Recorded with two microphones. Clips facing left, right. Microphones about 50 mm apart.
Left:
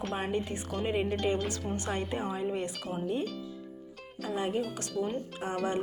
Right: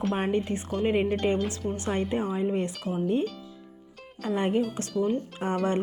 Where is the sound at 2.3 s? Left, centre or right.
Right.